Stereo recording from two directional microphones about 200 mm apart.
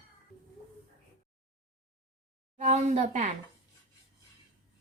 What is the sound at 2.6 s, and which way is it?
Speech, 35° right (ahead or behind).